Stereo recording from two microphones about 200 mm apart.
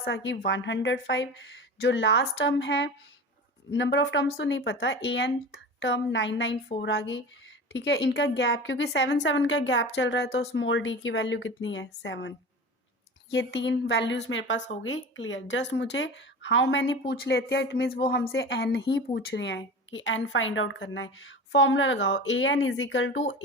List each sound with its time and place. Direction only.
0.0 s speech: 65° left (ahead or behind)
13.3 s speech: 65° left (ahead or behind)